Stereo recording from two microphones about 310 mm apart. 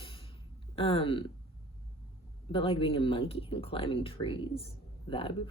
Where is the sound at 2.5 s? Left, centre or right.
Centre.